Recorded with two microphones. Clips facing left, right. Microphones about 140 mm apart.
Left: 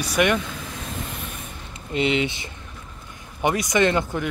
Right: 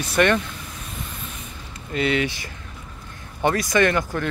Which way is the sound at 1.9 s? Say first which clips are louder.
Even; 20° left (ahead or behind).